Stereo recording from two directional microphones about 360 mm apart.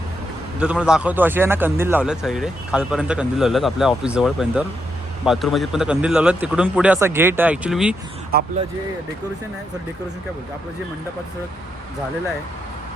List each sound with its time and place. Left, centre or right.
0.6 s a man's voice: centre
8.3 s speech: right